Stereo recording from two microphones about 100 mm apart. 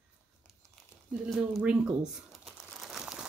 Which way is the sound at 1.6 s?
15° right (ahead or behind).